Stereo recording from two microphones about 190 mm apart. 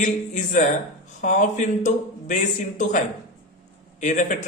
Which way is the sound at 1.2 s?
40° left (ahead or behind).